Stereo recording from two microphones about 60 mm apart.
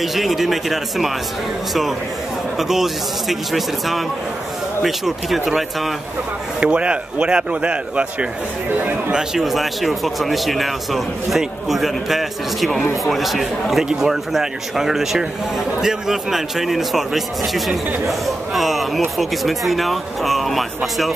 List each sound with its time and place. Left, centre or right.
0.0 s a man's voice: centre
6.6 s speech: centre
9.1 s a man's voice: centre